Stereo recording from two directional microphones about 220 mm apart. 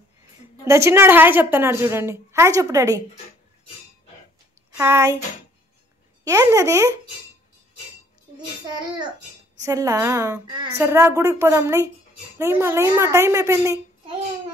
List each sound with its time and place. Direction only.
0.7 s a woman's voice: 10° right (ahead or behind)
4.7 s a woman's voice: 10° right (ahead or behind)
6.2 s a woman's voice: 15° right (ahead or behind)
8.4 s a child's voice: 20° right (ahead or behind)